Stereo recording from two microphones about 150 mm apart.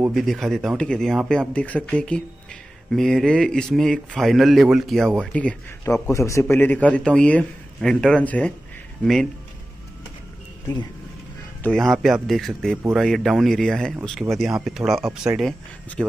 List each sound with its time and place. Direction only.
0.1 s speech: centre (ahead or behind)
6.0 s a man's voice: 20° left (ahead or behind); by 9.3 s centre (ahead or behind)
11.6 s speech: centre (ahead or behind)